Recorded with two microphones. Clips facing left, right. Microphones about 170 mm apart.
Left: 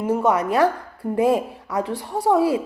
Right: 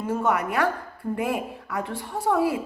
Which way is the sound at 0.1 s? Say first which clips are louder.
Left 5 dB; 20° left (ahead or behind).